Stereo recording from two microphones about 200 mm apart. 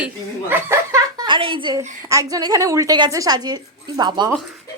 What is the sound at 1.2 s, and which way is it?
A woman's voice, 25° right (ahead or behind).